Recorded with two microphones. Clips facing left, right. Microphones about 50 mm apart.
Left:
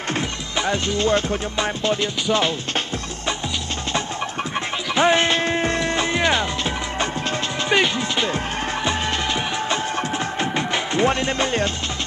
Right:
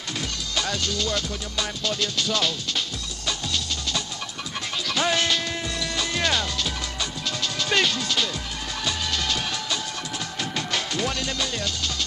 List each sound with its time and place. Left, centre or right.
0.6 s music: left
4.9 s music: left
7.7 s speech: left
8.8 s music: left